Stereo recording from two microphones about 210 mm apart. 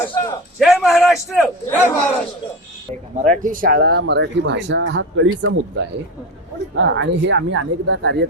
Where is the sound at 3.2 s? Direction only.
40° right (ahead or behind).